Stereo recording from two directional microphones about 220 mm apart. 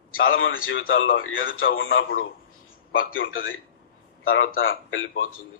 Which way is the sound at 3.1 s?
65° left (ahead or behind).